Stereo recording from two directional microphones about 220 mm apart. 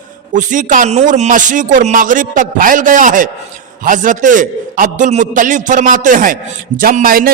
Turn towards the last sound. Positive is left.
turn(degrees=-40)  # may be behind; listen again after turning